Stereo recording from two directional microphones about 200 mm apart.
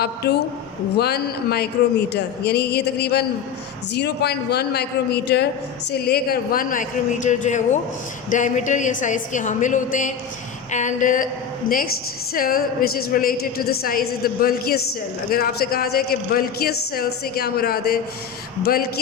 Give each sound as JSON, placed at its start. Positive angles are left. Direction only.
{"t": 0.0, "sound": "a man's voice", "side_deg": 55}
{"t": 12.3, "sound": "a man's voice", "side_deg": 45}